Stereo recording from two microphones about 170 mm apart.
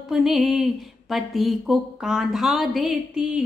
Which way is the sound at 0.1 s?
Centre (ahead or behind).